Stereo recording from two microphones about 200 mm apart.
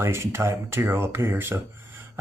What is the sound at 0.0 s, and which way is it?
Speech, 10° right (ahead or behind).